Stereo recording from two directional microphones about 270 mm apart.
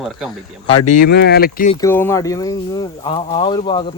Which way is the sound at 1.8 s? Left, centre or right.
Centre.